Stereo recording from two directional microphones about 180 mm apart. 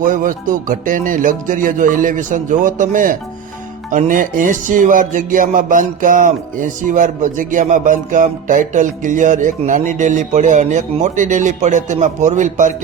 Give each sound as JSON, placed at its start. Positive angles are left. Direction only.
{"t": 0.0, "sound": "music", "side_deg": -45}